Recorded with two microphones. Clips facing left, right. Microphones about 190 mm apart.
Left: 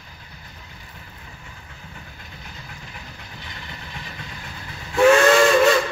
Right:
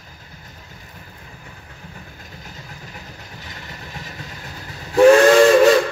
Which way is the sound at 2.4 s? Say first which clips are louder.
Right 1 dB; 40° right (ahead or behind).